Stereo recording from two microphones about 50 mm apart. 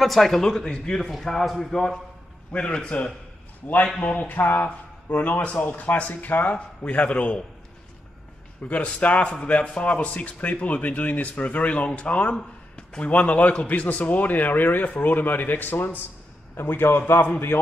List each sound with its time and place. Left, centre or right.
0.0 s a man's voice: centre
2.5 s a man's voice: left
8.6 s a man's voice: left